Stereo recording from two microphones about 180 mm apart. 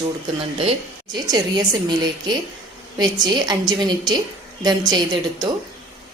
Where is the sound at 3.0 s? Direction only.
25° right (ahead or behind).